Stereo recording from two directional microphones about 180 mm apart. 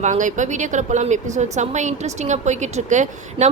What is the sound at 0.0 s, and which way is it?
A woman's voice, 40° right (ahead or behind).